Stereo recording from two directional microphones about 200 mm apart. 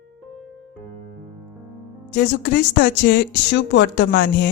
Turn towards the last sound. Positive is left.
turn(degrees=55)  # may be behind; listen again after turning